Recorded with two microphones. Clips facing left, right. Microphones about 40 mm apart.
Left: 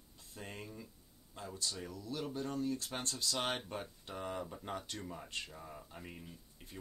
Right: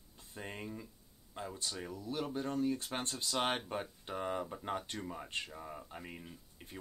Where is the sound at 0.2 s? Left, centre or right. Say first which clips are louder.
Right 3 dB; right.